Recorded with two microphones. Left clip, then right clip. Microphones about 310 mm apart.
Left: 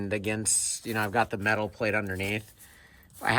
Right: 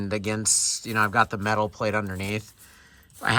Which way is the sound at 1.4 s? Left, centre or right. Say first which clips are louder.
Right 2 dB; right.